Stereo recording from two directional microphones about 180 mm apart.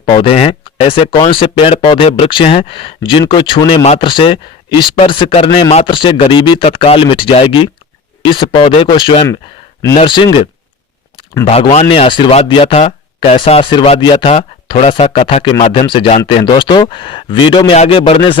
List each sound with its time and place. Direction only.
0.0 s speech: 30° left (ahead or behind)
11.5 s speech: 35° left (ahead or behind)